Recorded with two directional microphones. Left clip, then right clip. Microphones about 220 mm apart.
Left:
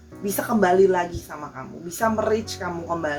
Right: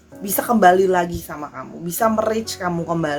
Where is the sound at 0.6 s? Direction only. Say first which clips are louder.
Right 4 dB; 45° right (ahead or behind).